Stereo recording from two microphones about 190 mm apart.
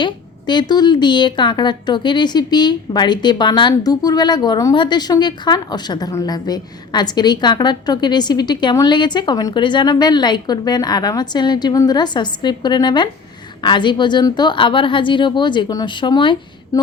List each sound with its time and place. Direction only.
0.0 s a woman's voice: 25° left (ahead or behind)